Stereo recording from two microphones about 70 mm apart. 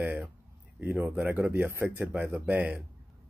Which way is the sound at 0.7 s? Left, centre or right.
Right.